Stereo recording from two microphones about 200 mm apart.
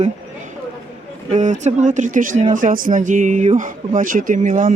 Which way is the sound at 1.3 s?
40° right (ahead or behind).